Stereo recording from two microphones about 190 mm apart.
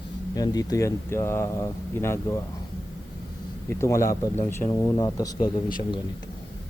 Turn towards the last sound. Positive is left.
turn(degrees=20)  # may be behind; listen again after turning